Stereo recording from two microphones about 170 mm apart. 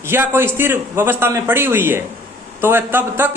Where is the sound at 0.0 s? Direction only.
15° right (ahead or behind).